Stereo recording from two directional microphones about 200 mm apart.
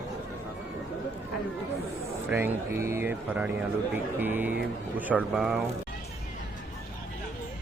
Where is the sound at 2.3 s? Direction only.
10° right (ahead or behind).